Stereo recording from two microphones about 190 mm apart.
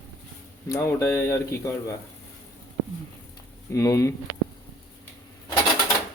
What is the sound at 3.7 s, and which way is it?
Speech, 15° left (ahead or behind).